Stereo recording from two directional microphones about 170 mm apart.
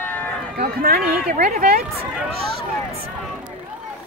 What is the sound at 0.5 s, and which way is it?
Speech, 60° right (ahead or behind).